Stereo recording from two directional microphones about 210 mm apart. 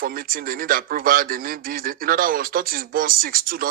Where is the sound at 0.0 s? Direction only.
45° right (ahead or behind).